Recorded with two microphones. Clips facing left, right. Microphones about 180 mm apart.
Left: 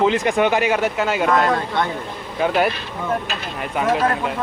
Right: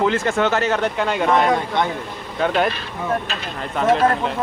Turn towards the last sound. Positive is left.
turn(degrees=10)  # may be behind; listen again after turning